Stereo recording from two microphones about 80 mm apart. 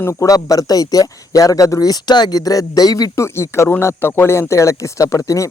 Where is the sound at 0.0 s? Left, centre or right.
Left.